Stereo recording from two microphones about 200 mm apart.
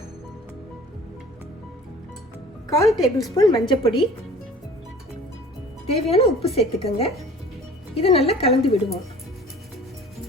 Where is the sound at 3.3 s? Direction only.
20° left (ahead or behind).